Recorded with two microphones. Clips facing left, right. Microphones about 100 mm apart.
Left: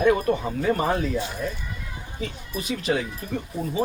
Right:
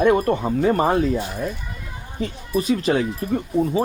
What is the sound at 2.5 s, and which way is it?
Speech, 40° right (ahead or behind).